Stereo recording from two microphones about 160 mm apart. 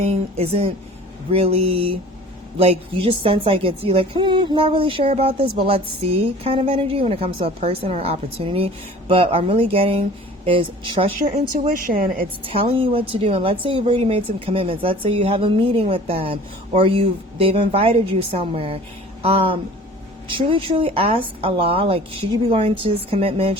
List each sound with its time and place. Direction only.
0.0 s a woman's voice: 40° right (ahead or behind)
11.2 s a woman's voice: 55° right (ahead or behind)
12.5 s a woman's voice: 35° right (ahead or behind)